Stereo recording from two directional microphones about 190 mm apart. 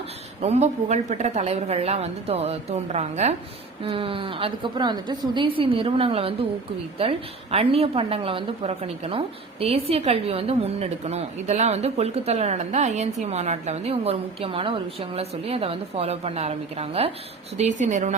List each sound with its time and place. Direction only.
0.4 s a woman's voice: 35° right (ahead or behind)